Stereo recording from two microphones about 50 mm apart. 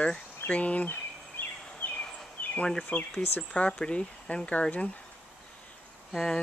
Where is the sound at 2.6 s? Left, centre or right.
Centre.